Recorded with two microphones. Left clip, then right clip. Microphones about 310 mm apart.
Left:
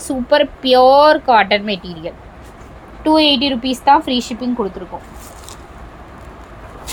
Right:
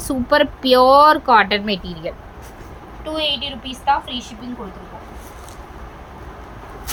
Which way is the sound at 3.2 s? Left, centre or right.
Centre.